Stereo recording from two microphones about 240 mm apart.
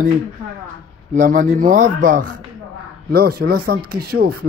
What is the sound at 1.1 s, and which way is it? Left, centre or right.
Speech, right.